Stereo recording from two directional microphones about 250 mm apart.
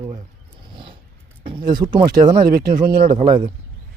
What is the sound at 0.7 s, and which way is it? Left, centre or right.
Zipper, centre.